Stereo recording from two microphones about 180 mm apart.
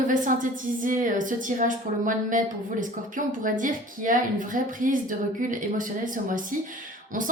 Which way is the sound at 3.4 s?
50° right (ahead or behind).